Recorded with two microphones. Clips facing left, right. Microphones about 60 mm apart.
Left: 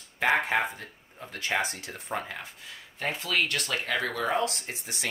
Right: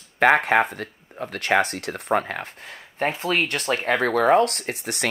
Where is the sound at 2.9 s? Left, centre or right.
Right.